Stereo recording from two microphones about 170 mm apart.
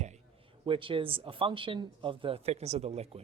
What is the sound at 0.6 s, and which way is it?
Speech, 30° right (ahead or behind).